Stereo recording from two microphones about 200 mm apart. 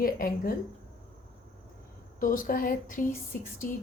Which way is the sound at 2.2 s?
45° left (ahead or behind).